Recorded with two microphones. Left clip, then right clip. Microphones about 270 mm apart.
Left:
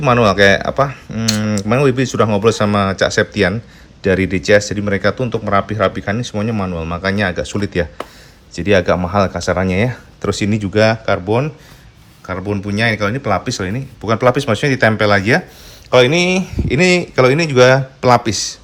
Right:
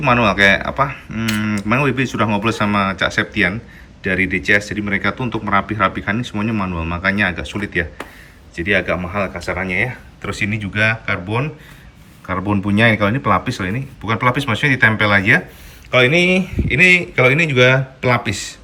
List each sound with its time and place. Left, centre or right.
0.0 s speech: centre
10.2 s speech: centre
12.3 s speech: centre